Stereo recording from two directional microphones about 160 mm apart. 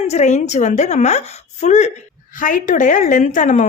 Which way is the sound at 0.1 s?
45° left (ahead or behind).